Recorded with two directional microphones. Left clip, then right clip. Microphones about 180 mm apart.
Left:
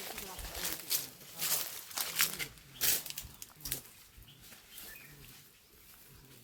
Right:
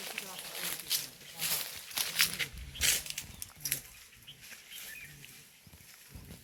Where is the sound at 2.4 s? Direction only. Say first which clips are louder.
Right 5 dB; 40° left (ahead or behind).